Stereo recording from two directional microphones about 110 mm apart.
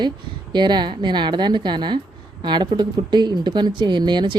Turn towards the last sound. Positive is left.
turn(degrees=-45)  # may be behind; listen again after turning